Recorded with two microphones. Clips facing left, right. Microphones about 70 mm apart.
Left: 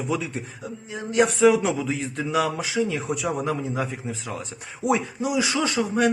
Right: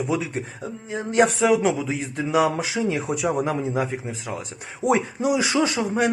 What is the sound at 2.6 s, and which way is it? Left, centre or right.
Speech, right.